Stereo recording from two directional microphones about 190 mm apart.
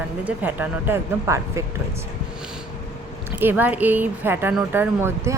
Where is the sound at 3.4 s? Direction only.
10° right (ahead or behind).